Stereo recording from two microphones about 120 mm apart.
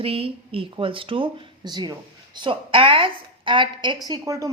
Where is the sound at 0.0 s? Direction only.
50° right (ahead or behind).